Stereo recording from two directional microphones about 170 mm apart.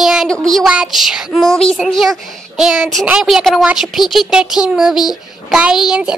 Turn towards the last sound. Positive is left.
turn(degrees=-5)  # may be behind; listen again after turning